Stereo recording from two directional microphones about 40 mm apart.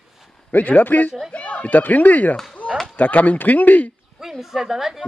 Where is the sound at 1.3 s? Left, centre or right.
Left.